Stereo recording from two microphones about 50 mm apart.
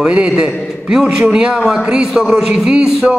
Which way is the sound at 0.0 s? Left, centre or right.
Centre.